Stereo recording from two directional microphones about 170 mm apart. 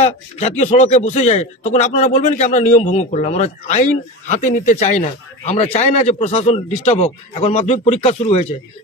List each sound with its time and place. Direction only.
0.0 s speech: 40° left (ahead or behind)